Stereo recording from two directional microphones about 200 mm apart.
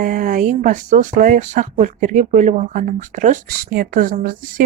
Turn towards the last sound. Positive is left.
turn(degrees=-45)  # may be behind; listen again after turning